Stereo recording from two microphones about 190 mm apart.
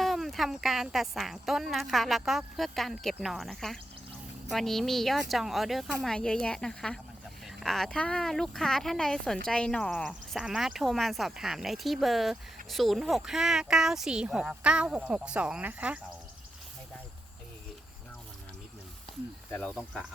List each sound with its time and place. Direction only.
0.0 s speech: centre (ahead or behind)
19.5 s speech: 10° left (ahead or behind)